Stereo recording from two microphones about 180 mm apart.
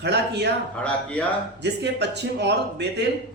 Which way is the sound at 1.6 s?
70° right (ahead or behind).